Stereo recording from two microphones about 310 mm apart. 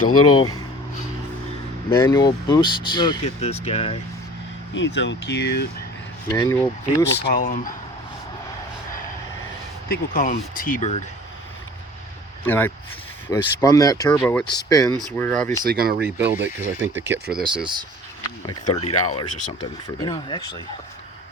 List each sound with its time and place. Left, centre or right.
0.1 s speech: left
2.0 s speech: centre
4.7 s speech: left
6.2 s speech: centre
7.2 s speech: left
9.9 s speech: left
12.5 s speech: centre
15.6 s speech: right
16.1 s speech: centre
17.0 s speech: right
17.4 s speech: centre
18.9 s speech: left
20.0 s speech: centre